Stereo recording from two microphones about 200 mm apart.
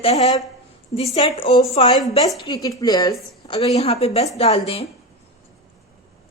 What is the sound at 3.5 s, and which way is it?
Speech, 30° left (ahead or behind).